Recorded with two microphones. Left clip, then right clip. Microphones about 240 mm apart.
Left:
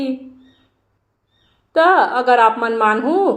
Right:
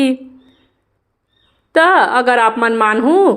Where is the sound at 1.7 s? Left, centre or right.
Right.